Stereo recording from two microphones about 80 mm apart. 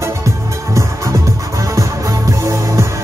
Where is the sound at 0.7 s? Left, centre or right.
Right.